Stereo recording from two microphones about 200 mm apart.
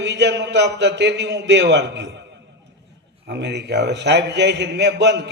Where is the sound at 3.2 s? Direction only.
60° right (ahead or behind).